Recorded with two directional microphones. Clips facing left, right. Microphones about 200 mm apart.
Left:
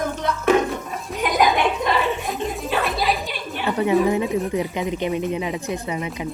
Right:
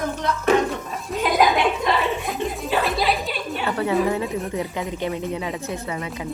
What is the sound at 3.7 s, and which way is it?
A woman's voice, 20° left (ahead or behind).